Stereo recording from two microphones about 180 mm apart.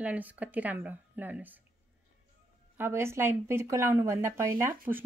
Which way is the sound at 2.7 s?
15° right (ahead or behind).